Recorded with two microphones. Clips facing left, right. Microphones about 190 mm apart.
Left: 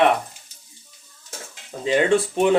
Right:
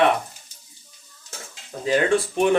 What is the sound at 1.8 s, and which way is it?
Speech, 20° left (ahead or behind).